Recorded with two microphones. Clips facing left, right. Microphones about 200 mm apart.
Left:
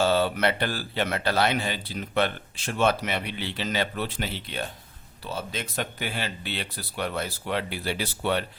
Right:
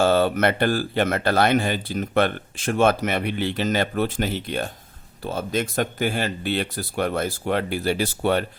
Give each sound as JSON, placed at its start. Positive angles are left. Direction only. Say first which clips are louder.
{"t": 0.0, "sound": "speech", "louder": "right 4 dB", "side_deg": -50}